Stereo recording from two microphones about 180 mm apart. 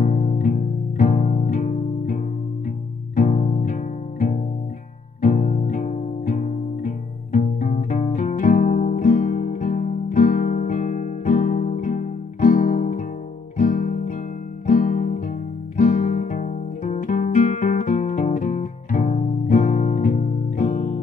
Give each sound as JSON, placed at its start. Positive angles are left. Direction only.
{"t": 0.0, "sound": "music", "side_deg": 40}